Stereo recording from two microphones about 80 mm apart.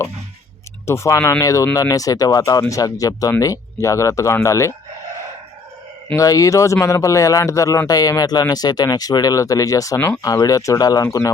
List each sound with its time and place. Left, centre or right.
0.9 s speech: left
6.1 s speech: left